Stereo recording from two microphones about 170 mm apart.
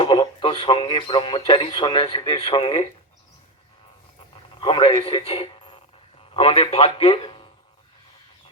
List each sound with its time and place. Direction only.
0.0 s speech: 30° left (ahead or behind)
4.6 s a man's voice: 30° left (ahead or behind)